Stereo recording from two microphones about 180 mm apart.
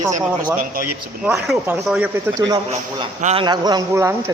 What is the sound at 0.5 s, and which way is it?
Speech, 50° right (ahead or behind).